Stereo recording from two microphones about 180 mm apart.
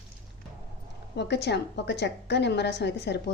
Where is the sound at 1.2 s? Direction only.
70° left (ahead or behind).